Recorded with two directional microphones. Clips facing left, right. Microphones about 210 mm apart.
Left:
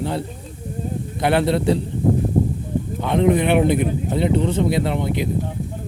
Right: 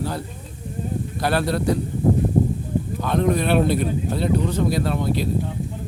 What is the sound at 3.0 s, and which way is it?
A man's voice, 20° left (ahead or behind).